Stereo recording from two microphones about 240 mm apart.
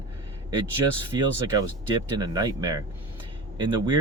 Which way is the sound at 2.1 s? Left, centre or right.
Centre.